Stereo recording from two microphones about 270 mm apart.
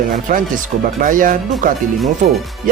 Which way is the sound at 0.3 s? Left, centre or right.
Right.